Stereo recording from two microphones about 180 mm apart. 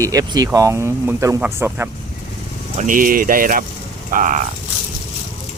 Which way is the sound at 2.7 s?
45° right (ahead or behind).